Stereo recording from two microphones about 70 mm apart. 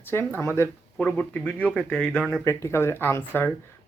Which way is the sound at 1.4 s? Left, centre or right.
Centre.